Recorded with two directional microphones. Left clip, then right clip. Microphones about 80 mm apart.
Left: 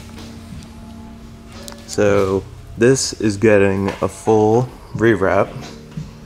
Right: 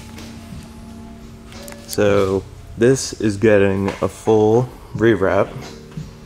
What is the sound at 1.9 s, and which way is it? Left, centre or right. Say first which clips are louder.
Speech: left 1 dB; centre.